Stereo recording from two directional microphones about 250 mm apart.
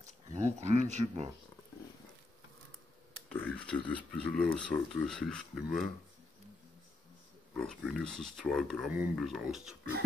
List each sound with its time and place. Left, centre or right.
0.0 s speech: right
3.3 s a sound: centre
4.1 s speech: centre
7.5 s speech: centre